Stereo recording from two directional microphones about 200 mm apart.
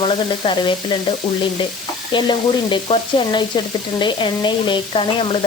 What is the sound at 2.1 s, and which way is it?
Sizzle, 25° left (ahead or behind).